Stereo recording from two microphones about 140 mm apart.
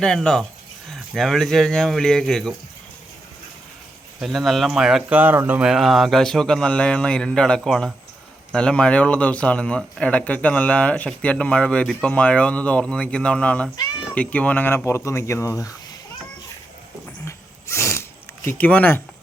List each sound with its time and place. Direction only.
0.0 s speech: 5° left (ahead or behind)
4.2 s speech: centre (ahead or behind); by 15.7 s 20° left (ahead or behind)
17.2 s snort: 20° left (ahead or behind)
18.4 s speech: 10° left (ahead or behind)